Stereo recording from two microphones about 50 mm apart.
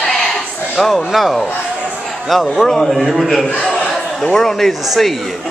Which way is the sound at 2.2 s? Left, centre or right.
Centre.